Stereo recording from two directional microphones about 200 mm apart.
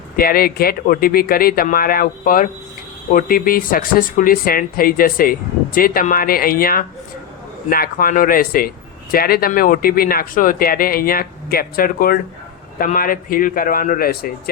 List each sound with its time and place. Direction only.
0.2 s speech: 50° left (ahead or behind)